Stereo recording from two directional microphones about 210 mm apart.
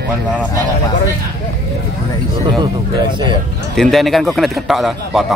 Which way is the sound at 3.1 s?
20° right (ahead or behind).